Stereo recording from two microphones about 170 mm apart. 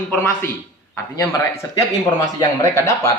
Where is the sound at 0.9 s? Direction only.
15° left (ahead or behind).